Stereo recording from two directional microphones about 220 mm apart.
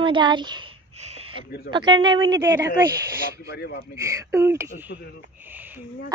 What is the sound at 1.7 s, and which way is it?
Speech, 20° right (ahead or behind).